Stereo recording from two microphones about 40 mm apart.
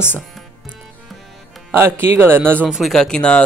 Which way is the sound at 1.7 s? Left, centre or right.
Right.